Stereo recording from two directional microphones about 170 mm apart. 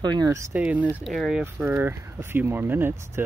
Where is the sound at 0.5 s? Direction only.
10° right (ahead or behind).